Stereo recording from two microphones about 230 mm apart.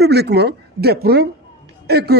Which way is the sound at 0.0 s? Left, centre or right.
Right.